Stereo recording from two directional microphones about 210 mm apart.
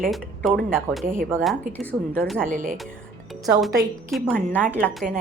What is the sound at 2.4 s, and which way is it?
Speech, 40° right (ahead or behind).